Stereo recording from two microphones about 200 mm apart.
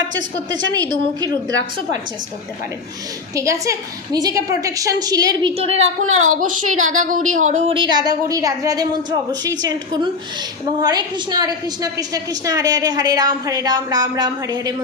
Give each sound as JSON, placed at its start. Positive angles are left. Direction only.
{"t": 0.5, "sound": "a woman's voice", "side_deg": -20}
{"t": 3.3, "sound": "a woman's voice", "side_deg": -15}
{"t": 6.1, "sound": "speech", "side_deg": -90}
{"t": 6.3, "sound": "speech", "side_deg": -40}
{"t": 6.7, "sound": "speech", "side_deg": -90}
{"t": 7.3, "sound": "speech", "side_deg": -35}
{"t": 7.8, "sound": "a woman's voice", "side_deg": -20}